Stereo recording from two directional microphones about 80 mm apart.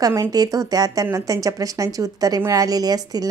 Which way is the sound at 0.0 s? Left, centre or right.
Right.